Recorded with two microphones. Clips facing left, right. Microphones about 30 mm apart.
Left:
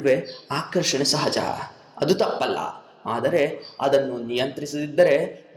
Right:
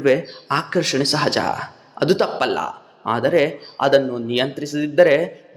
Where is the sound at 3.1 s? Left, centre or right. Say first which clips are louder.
Right 4 dB; right.